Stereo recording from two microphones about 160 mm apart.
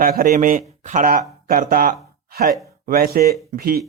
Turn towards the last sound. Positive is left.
turn(degrees=-65)  # may be behind; listen again after turning